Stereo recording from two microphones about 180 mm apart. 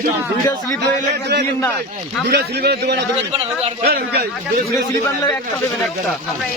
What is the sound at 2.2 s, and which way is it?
Speech, 65° right (ahead or behind).